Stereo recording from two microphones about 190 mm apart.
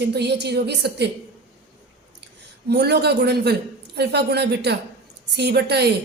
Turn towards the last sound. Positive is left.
turn(degrees=-60)  # may be behind; listen again after turning